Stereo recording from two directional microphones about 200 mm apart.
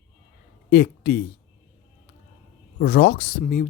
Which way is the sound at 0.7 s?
55° left (ahead or behind).